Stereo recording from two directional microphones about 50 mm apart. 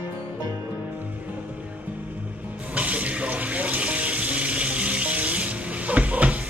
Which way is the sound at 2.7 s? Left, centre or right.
Right.